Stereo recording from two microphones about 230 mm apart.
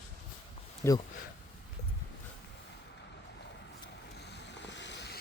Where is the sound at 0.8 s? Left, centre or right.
Centre.